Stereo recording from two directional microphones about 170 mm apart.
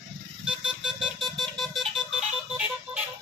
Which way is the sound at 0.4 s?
5° right (ahead or behind).